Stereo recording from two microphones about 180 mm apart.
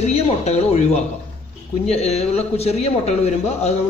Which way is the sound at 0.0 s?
35° left (ahead or behind).